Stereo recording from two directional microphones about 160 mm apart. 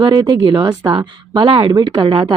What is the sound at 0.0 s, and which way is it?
Speech, 25° right (ahead or behind).